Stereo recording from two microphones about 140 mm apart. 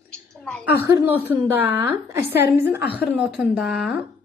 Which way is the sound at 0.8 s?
15° right (ahead or behind).